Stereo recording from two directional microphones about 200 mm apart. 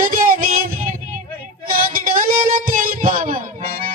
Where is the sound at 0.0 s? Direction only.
45° right (ahead or behind).